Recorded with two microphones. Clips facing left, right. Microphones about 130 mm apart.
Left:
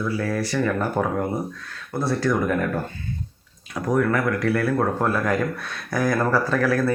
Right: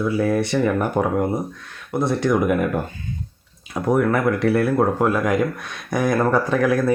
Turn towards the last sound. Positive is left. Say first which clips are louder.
# right 3 dB
turn(degrees=-15)  # may be behind; listen again after turning